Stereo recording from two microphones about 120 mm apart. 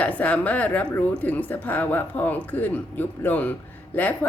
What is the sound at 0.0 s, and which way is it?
Speech, 10° left (ahead or behind).